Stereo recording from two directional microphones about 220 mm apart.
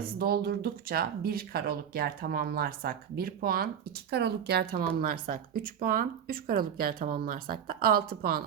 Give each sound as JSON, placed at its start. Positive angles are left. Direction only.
{"t": 0.2, "sound": "speech", "side_deg": -45}